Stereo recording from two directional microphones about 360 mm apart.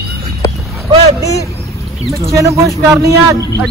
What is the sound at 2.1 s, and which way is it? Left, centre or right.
Speech, centre.